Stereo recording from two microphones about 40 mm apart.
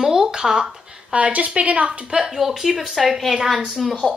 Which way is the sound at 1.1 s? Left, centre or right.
Right.